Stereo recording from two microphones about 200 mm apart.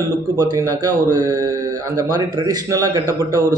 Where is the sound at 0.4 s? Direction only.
20° right (ahead or behind).